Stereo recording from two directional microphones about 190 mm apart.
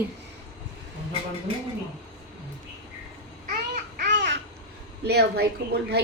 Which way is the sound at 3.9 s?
55° right (ahead or behind).